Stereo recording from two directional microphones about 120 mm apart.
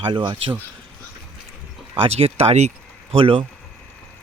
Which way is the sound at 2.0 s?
55° right (ahead or behind).